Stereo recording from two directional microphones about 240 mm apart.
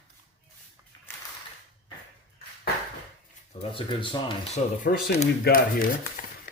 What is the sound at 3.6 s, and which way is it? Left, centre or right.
Speech, left.